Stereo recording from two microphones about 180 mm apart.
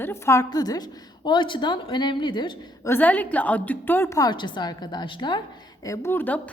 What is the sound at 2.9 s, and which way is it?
A woman's voice, 10° left (ahead or behind).